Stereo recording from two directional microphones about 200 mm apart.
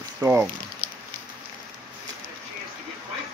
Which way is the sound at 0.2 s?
10° right (ahead or behind).